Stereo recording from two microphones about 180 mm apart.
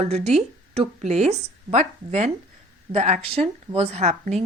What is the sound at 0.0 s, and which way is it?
A woman's voice, 35° right (ahead or behind).